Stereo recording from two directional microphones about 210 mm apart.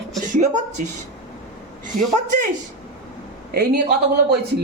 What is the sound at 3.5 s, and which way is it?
Speech, 50° right (ahead or behind).